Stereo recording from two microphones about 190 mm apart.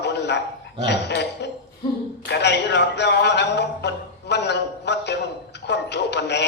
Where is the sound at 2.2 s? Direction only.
65° left (ahead or behind).